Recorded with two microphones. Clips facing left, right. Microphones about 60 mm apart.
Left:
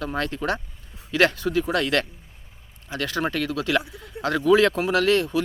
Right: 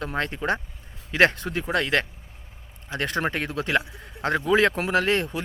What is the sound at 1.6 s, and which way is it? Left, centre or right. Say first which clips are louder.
Speech: left 1 dB; right.